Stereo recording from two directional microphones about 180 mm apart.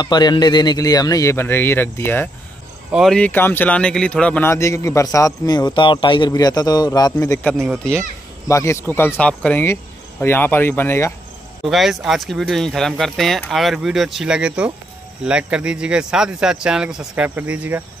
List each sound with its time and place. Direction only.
0.0 s a man's voice: 25° left (ahead or behind)
2.9 s speech: centre (ahead or behind); by 7.3 s 20° left (ahead or behind)
7.4 s speech: centre (ahead or behind)
8.5 s speech: 15° left (ahead or behind)
11.7 s speech: centre (ahead or behind)